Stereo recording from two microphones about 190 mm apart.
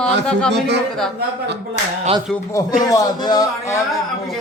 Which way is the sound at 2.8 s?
20° left (ahead or behind).